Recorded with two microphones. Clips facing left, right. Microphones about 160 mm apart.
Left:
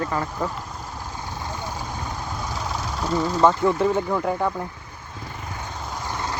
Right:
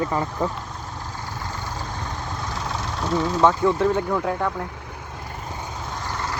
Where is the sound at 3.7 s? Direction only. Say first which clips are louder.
Even; 5° left (ahead or behind).